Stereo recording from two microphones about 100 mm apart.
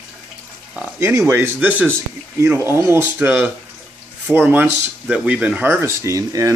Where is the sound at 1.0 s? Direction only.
25° right (ahead or behind).